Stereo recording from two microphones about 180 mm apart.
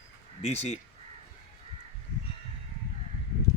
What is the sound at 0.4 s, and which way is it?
Speech, 35° left (ahead or behind).